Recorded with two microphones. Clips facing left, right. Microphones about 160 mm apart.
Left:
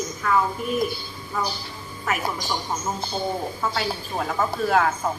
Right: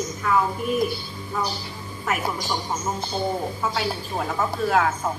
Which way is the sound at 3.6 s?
Centre (ahead or behind).